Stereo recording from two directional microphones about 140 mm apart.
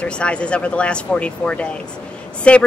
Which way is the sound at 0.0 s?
10° left (ahead or behind).